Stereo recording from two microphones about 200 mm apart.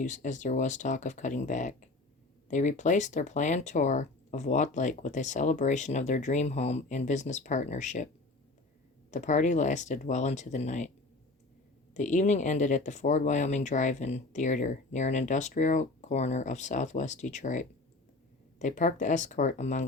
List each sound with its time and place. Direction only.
0.0 s speech: 40° left (ahead or behind)
9.0 s speech: 35° left (ahead or behind)
11.9 s speech: 35° left (ahead or behind)